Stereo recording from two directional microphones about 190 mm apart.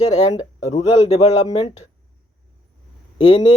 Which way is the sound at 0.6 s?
35° left (ahead or behind).